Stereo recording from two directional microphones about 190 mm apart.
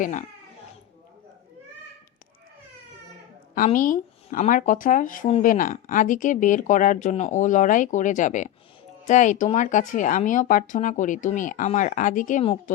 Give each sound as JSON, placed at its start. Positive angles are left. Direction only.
{"t": 0.0, "sound": "speech", "side_deg": 40}
{"t": 3.5, "sound": "speech", "side_deg": 45}